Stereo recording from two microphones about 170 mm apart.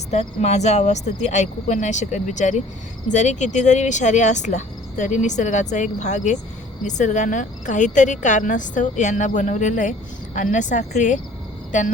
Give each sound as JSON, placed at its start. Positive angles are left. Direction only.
{"t": 0.1, "sound": "speech", "side_deg": 40}